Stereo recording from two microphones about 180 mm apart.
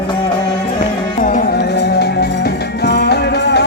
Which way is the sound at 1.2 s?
50° left (ahead or behind).